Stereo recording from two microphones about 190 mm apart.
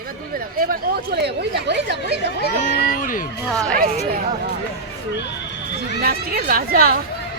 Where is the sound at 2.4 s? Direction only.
50° left (ahead or behind).